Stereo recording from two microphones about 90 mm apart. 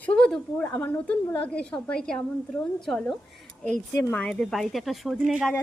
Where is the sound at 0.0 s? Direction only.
10° left (ahead or behind).